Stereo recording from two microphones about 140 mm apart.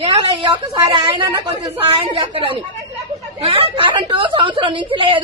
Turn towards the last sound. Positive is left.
turn(degrees=-35)  # may be behind; listen again after turning